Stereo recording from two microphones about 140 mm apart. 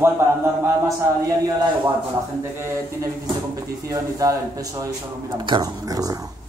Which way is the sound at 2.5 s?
20° right (ahead or behind).